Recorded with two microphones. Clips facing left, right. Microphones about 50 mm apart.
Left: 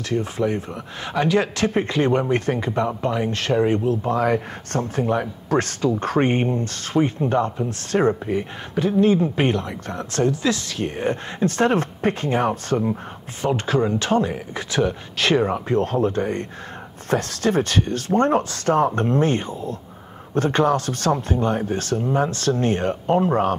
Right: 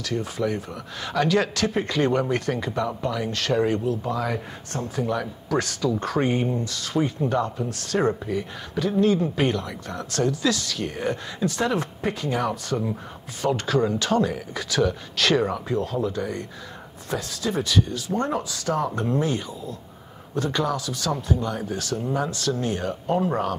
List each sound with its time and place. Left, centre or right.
0.1 s speech: left
15.7 s speech: left